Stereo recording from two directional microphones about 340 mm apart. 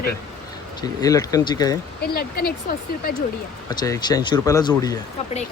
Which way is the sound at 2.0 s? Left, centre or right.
Left.